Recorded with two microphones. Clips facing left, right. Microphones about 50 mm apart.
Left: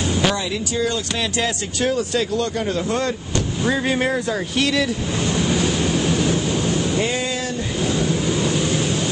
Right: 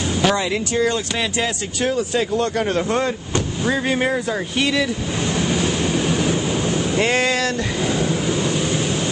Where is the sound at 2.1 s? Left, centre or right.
Right.